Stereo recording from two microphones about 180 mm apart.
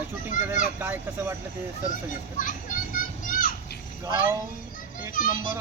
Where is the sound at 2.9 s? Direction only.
50° left (ahead or behind).